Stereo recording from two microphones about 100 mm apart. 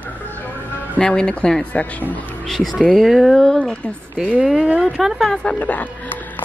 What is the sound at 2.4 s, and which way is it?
Speech, 5° left (ahead or behind).